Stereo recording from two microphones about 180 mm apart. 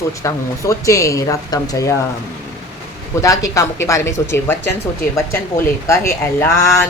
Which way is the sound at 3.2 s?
15° left (ahead or behind).